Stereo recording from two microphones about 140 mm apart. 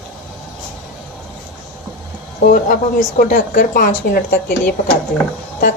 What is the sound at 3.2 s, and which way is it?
A woman's voice, 75° left (ahead or behind).